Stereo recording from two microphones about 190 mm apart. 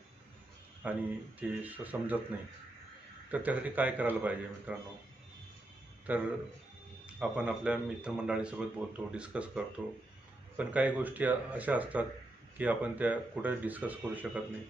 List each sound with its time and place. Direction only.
0.8 s speech: 10° right (ahead or behind)
3.3 s speech: 10° right (ahead or behind)
6.1 s speech: 10° right (ahead or behind)